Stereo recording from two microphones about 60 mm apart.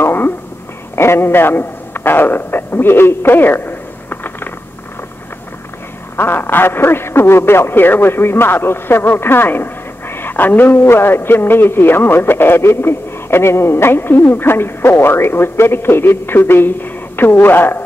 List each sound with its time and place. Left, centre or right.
0.0 s a sound: left
0.9 s a man's voice: left
6.1 s a man's voice: left